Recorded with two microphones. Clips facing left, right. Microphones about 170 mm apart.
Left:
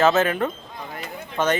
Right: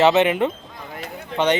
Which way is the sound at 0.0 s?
20° right (ahead or behind).